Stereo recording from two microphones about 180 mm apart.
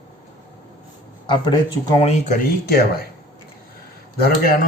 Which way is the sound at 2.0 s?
40° left (ahead or behind).